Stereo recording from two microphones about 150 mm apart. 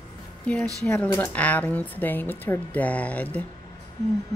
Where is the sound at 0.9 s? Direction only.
15° left (ahead or behind).